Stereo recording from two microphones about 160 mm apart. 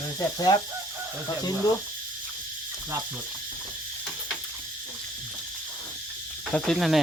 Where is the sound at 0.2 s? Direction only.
25° left (ahead or behind).